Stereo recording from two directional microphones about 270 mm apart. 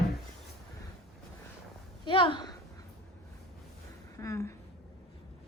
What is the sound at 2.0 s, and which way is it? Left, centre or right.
Speech, centre.